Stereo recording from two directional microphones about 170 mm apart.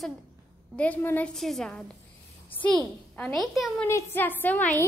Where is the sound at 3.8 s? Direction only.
15° left (ahead or behind).